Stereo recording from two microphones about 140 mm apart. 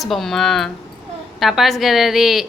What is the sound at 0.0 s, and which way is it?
A woman's voice, centre (ahead or behind).